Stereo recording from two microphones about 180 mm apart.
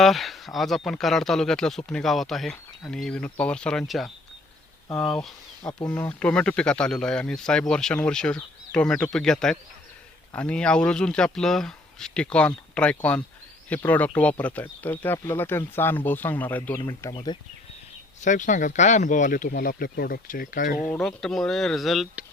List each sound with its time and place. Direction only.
0.0 s speech: centre (ahead or behind); by 17.2 s 15° left (ahead or behind)
18.2 s speech: 45° left (ahead or behind)
20.9 s speech: 5° left (ahead or behind)